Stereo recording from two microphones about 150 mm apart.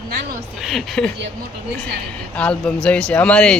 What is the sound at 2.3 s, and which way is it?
Speech, 5° left (ahead or behind).